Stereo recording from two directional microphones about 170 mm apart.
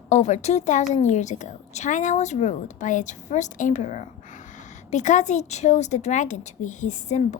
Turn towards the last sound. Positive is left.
turn(degrees=45)  # may be behind; listen again after turning